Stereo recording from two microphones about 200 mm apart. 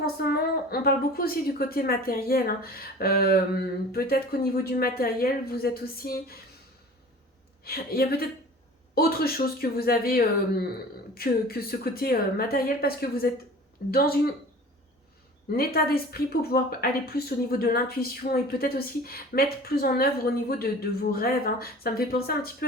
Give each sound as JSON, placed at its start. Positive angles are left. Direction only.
{"t": 0.0, "sound": "a woman's voice", "side_deg": 50}
{"t": 7.6, "sound": "a woman's voice", "side_deg": 50}
{"t": 15.5, "sound": "a woman's voice", "side_deg": 50}